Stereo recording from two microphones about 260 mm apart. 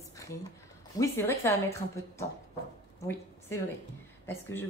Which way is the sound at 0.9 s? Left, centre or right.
Centre.